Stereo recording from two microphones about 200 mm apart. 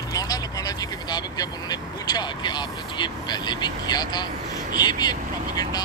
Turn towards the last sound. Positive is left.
turn(degrees=20)  # may be behind; listen again after turning